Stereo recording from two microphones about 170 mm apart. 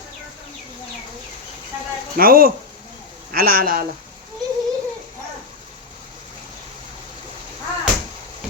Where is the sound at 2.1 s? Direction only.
60° right (ahead or behind).